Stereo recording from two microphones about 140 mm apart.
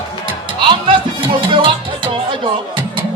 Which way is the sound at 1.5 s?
35° right (ahead or behind).